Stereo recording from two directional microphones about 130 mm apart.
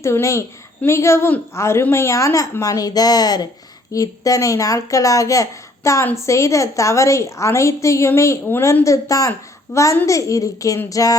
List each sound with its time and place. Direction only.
0.0 s a woman's voice: 20° left (ahead or behind)